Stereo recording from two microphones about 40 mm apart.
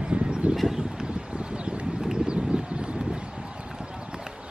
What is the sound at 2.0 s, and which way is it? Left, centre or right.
Clip-clop, centre.